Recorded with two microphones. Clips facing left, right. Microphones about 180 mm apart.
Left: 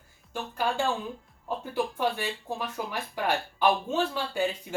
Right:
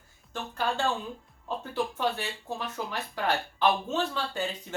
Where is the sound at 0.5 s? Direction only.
10° left (ahead or behind).